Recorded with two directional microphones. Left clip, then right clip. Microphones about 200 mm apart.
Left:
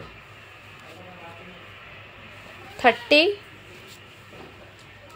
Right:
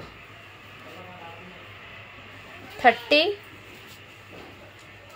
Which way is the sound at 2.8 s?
35° left (ahead or behind).